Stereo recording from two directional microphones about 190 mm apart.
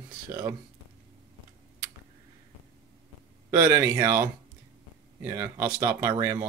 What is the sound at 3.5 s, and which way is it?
Speech, 10° right (ahead or behind).